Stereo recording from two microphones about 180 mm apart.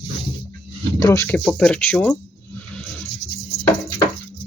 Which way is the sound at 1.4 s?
5° left (ahead or behind).